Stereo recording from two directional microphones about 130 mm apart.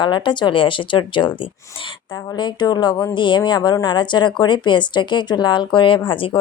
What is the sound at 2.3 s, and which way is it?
Speech, 35° left (ahead or behind).